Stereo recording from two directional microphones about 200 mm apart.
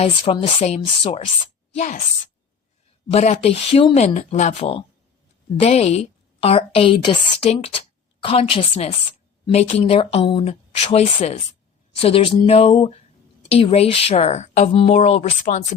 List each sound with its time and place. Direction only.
0.0 s a woman's voice: 25° left (ahead or behind)
3.1 s a woman's voice: 30° left (ahead or behind)